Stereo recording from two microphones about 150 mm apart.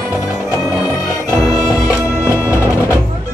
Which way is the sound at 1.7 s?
20° left (ahead or behind).